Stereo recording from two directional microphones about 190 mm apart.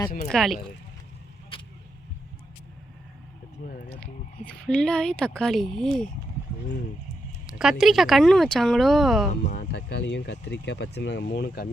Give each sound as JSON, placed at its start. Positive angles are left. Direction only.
{"t": 0.3, "sound": "speech", "side_deg": 0}
{"t": 1.5, "sound": "vehicle", "side_deg": 25}
{"t": 3.6, "sound": "speech", "side_deg": 45}
{"t": 4.0, "sound": "speech", "side_deg": 5}
{"t": 7.4, "sound": "speech", "side_deg": -5}
{"t": 9.5, "sound": "speech", "side_deg": 55}